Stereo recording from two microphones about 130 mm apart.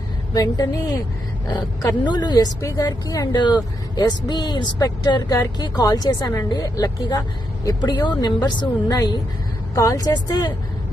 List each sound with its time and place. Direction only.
0.3 s a woman's voice: 30° left (ahead or behind)